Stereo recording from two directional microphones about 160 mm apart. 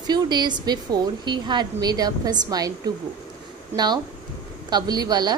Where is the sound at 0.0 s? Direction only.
25° right (ahead or behind).